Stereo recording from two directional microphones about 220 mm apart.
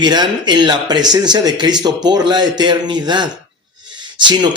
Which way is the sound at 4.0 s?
20° right (ahead or behind).